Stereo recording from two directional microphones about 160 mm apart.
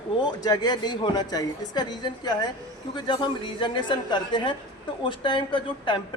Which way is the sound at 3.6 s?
30° left (ahead or behind).